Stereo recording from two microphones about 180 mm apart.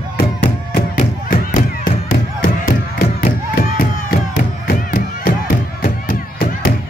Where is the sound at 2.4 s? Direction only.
55° left (ahead or behind).